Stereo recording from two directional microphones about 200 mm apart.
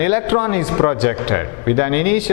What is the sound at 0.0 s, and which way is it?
A man's voice, 10° left (ahead or behind).